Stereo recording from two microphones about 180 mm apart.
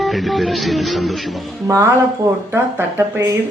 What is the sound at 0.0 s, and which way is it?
Speech, centre (ahead or behind).